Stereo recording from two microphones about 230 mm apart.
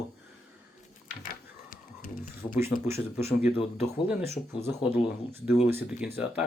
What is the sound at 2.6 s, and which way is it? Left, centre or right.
Speech, centre.